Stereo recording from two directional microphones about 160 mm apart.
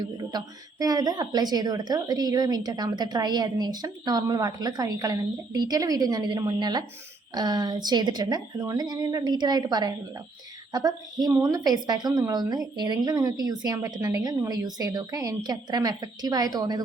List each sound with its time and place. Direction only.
0.0 s a woman's voice: 25° right (ahead or behind)